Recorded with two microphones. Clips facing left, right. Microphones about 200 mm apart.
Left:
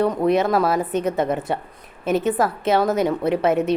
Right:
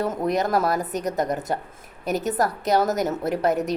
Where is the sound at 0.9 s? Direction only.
40° right (ahead or behind).